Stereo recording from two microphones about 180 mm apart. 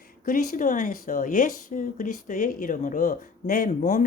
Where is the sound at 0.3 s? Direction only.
45° left (ahead or behind).